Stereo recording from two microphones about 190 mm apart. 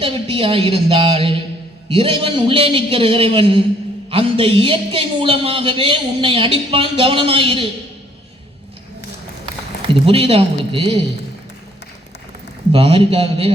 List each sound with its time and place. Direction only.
0.0 s speech: 30° right (ahead or behind)
9.9 s speech: 30° right (ahead or behind)
12.7 s speech: 25° right (ahead or behind)